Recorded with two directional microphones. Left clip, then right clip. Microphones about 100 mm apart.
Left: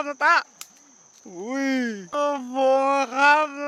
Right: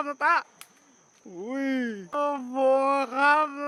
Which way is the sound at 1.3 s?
25° left (ahead or behind).